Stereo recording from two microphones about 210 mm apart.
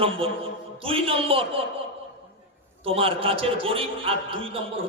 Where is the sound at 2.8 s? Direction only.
25° right (ahead or behind).